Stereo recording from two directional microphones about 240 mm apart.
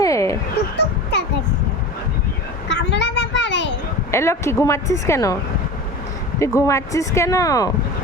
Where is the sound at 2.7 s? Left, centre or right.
Left.